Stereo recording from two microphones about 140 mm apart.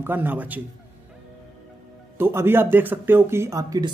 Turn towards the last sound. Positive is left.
turn(degrees=-25)  # may be behind; listen again after turning